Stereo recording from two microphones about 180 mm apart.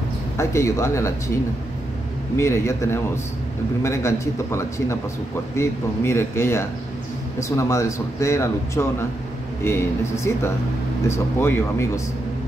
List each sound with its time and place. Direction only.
0.4 s speech: 15° left (ahead or behind)
2.3 s speech: 15° left (ahead or behind)